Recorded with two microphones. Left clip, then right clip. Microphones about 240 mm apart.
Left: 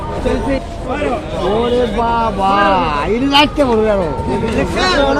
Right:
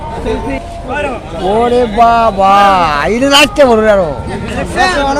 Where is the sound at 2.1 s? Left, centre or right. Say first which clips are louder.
Right 7 dB; right.